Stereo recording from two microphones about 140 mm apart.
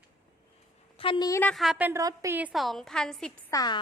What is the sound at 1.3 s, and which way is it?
Speech, 10° left (ahead or behind).